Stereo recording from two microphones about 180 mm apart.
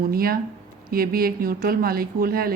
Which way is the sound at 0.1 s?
55° right (ahead or behind).